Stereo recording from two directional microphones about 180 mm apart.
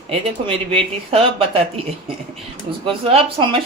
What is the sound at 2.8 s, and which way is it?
Speech, 30° right (ahead or behind).